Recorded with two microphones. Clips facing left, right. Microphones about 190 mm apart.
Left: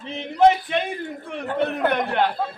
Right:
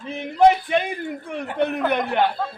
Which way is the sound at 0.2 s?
10° right (ahead or behind).